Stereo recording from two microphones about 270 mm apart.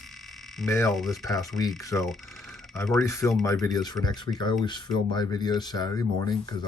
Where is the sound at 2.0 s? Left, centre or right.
Centre.